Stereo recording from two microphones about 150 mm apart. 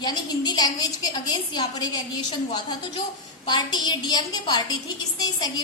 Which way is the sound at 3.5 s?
30° left (ahead or behind).